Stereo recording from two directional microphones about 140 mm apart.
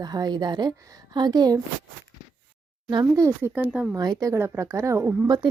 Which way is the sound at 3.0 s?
20° right (ahead or behind).